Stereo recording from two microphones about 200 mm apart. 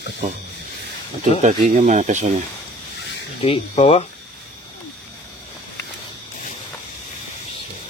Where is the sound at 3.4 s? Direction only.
30° left (ahead or behind).